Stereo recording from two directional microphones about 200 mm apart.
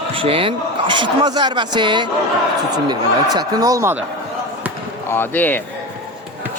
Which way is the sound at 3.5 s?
15° right (ahead or behind).